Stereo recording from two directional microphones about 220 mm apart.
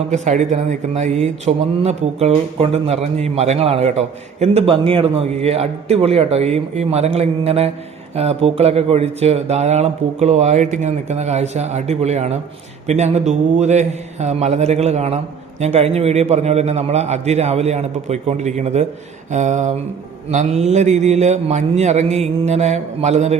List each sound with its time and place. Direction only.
0.1 s speech: 30° right (ahead or behind)